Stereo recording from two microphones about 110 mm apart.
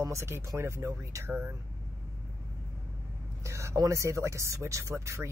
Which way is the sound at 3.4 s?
25° right (ahead or behind).